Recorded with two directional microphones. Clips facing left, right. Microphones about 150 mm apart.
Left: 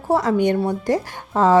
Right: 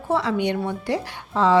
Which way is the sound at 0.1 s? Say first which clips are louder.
Left 4 dB; 45° left (ahead or behind).